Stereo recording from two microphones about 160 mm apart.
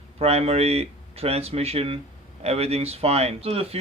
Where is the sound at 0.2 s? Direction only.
40° right (ahead or behind).